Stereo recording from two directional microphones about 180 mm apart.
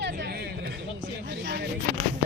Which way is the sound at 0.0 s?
75° right (ahead or behind).